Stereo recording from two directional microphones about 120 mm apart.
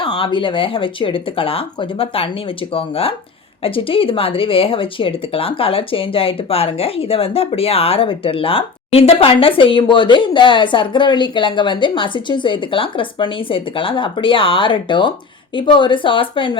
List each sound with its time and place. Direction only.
0.0 s speech: 45° left (ahead or behind)